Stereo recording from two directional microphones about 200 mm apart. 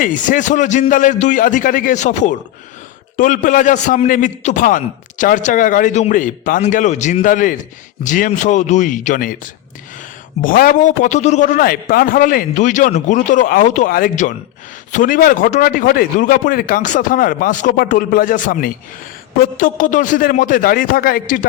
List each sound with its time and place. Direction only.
0.0 s a man's voice: 40° left (ahead or behind)